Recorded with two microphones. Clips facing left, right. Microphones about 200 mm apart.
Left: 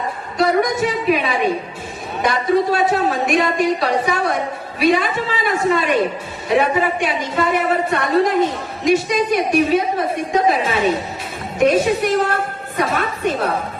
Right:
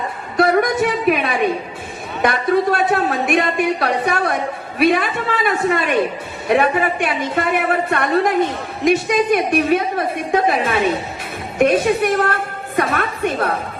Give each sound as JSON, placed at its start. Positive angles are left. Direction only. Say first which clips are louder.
{"t": 0.3, "sound": "a woman's voice", "louder": "right 2 dB", "side_deg": -55}